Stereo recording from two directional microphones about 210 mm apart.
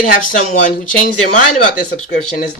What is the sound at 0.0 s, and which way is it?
Speech, 40° left (ahead or behind).